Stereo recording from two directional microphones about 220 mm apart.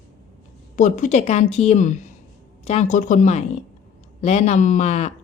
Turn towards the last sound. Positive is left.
turn(degrees=30)  # may be behind; listen again after turning